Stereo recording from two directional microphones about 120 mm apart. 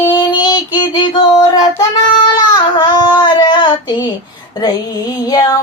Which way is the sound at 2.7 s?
35° left (ahead or behind).